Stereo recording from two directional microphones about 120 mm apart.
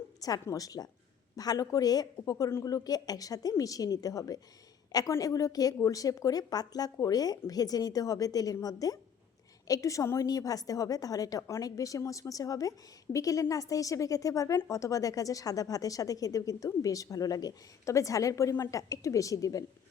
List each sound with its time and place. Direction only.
0.2 s a woman's voice: 30° left (ahead or behind)